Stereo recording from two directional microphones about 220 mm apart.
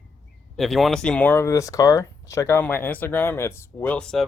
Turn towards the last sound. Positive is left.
turn(degrees=5)  # may be behind; listen again after turning